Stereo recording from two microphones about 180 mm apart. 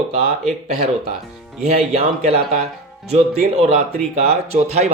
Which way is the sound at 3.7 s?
35° right (ahead or behind).